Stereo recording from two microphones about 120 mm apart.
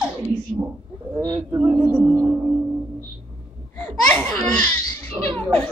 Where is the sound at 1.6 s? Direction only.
15° right (ahead or behind).